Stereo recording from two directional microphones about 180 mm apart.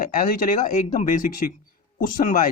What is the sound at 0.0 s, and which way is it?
Speech, 50° left (ahead or behind).